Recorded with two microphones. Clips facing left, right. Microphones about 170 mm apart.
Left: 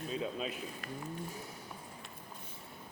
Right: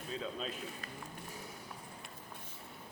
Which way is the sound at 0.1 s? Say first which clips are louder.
Left 2 dB; 10° left (ahead or behind).